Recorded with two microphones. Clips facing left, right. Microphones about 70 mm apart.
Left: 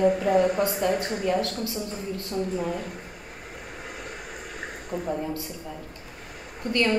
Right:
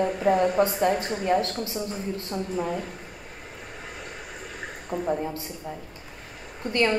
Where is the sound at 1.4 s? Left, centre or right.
Right.